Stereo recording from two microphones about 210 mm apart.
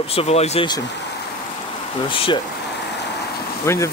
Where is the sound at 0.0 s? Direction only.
30° left (ahead or behind).